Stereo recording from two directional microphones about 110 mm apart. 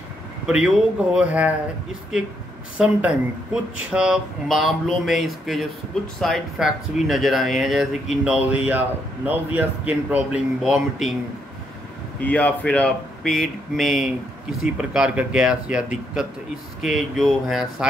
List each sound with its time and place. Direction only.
0.5 s a man's voice: 5° right (ahead or behind)
2.8 s a man's voice: 10° right (ahead or behind)
8.6 s a man's voice: 15° right (ahead or behind)
10.6 s speech: 5° right (ahead or behind)
12.2 s a man's voice: 15° left (ahead or behind); by 17.8 s 5° right (ahead or behind)